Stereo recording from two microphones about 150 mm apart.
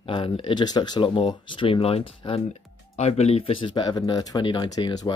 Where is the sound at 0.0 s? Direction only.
35° left (ahead or behind).